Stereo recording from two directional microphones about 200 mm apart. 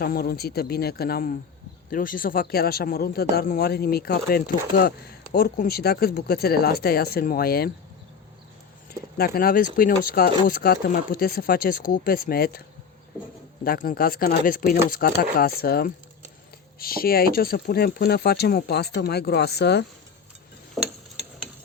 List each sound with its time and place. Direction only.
0.0 s a man's voice: 50° left (ahead or behind)
8.9 s a man's voice: 50° left (ahead or behind)
13.7 s a man's voice: 45° left (ahead or behind)
20.8 s stir: centre (ahead or behind)